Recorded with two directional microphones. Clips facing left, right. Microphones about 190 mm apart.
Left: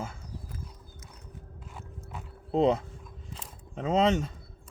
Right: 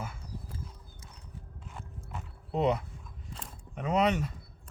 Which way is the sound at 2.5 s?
25° left (ahead or behind).